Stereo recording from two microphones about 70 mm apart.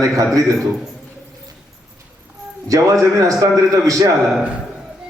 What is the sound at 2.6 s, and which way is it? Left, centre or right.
A man's voice, right.